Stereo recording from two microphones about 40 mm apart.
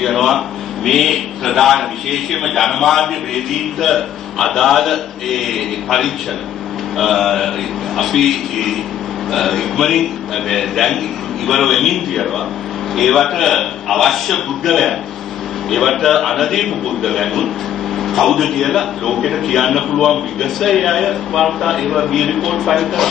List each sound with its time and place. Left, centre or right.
0.0 s a man's voice: centre